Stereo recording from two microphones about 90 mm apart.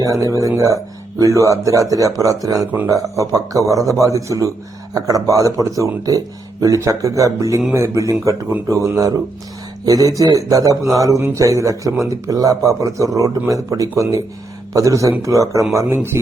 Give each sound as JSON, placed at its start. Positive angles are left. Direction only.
{"t": 0.0, "sound": "speech", "side_deg": -40}